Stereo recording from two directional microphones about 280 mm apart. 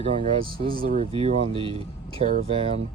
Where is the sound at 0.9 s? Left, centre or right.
Right.